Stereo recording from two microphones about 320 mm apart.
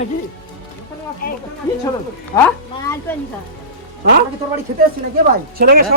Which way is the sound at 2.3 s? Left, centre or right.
Centre.